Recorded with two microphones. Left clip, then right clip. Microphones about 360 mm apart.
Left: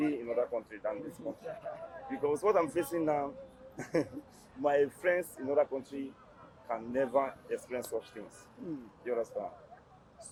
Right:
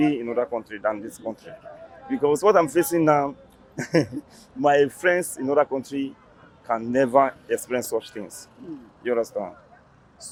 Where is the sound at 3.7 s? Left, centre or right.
Right.